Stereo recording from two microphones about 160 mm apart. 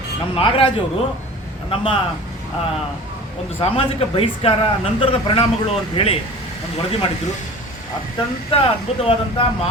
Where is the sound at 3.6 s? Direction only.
35° left (ahead or behind).